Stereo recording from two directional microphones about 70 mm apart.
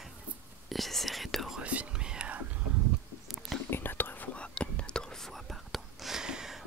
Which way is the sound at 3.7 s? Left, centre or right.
Left.